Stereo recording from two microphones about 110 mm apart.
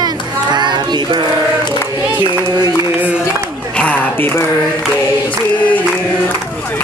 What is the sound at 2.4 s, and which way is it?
Speech, 35° right (ahead or behind).